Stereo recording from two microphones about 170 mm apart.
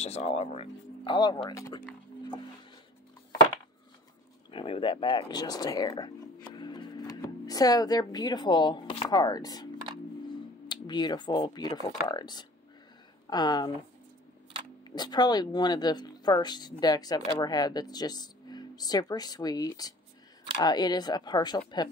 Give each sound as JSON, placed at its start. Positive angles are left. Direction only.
{"t": 0.0, "sound": "speech", "side_deg": 40}
{"t": 4.5, "sound": "speech", "side_deg": 30}
{"t": 9.1, "sound": "speech", "side_deg": 25}
{"t": 10.7, "sound": "speech", "side_deg": 25}
{"t": 14.9, "sound": "speech", "side_deg": 25}